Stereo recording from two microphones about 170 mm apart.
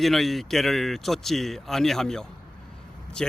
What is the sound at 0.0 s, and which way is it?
Speech, centre (ahead or behind).